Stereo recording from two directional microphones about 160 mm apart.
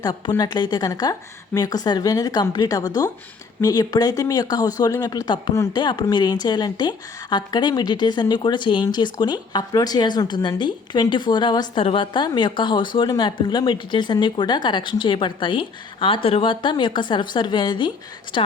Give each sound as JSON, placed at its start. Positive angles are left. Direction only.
{"t": 0.0, "sound": "speech", "side_deg": 25}